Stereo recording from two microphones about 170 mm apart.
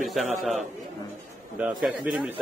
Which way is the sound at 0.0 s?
Centre (ahead or behind).